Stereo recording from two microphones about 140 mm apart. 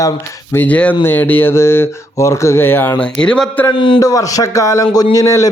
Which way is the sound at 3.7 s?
40° left (ahead or behind).